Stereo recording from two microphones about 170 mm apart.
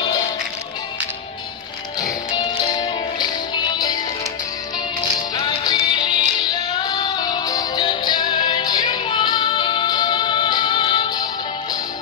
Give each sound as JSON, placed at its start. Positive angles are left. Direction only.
{"t": 2.0, "sound": "music", "side_deg": 25}
{"t": 5.3, "sound": "music", "side_deg": 25}